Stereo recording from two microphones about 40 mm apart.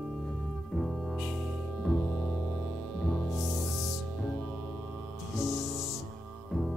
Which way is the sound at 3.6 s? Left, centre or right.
Centre.